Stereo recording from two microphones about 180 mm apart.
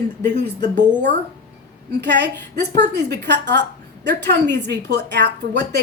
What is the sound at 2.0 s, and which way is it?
A woman's voice, 75° right (ahead or behind).